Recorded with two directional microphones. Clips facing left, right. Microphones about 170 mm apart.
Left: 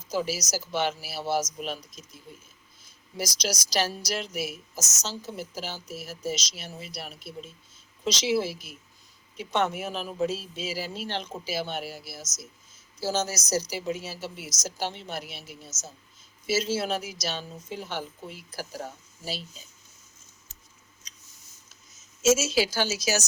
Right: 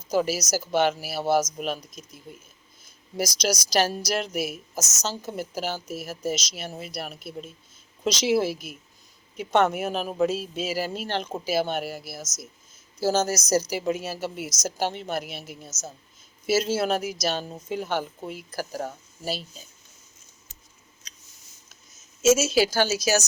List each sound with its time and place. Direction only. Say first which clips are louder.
0.1 s a woman's voice: right 5 dB; 50° right (ahead or behind)
22.4 s a woman's voice: right 4 dB; 55° right (ahead or behind)